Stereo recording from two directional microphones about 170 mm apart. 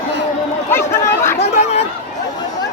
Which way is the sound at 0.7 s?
15° left (ahead or behind).